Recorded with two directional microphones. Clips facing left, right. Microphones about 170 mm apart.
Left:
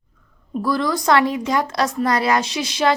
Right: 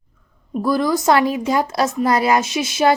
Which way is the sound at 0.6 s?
25° right (ahead or behind).